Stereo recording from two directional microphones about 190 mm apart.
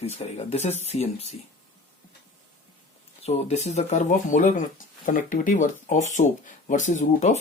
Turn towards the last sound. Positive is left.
turn(degrees=40)  # may be behind; listen again after turning